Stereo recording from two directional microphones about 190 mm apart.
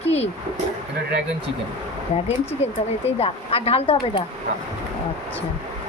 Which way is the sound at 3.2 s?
30° left (ahead or behind).